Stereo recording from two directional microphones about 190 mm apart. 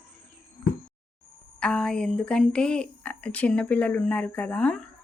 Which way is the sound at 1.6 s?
5° left (ahead or behind).